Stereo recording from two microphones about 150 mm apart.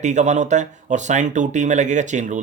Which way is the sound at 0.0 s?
50° right (ahead or behind).